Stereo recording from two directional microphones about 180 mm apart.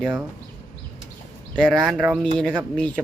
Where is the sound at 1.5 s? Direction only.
5° left (ahead or behind).